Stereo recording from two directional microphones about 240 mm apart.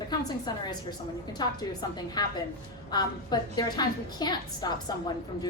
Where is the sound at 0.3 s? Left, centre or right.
Centre.